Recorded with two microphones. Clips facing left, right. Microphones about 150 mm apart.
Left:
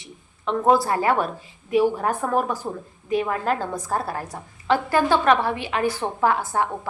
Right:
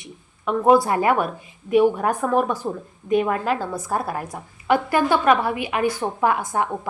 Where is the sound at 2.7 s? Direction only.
Centre (ahead or behind).